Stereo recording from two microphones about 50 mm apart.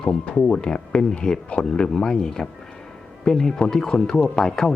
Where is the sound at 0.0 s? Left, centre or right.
Centre.